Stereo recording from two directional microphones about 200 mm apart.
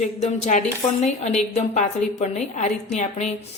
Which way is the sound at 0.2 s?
35° left (ahead or behind).